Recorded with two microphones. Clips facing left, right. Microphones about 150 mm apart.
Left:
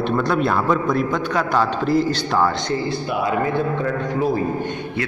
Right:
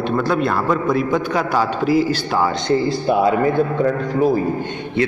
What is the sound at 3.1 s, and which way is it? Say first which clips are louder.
Speech: right 10 dB; 35° right (ahead or behind).